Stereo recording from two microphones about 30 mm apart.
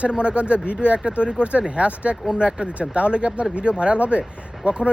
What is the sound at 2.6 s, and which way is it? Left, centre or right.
Speech, right.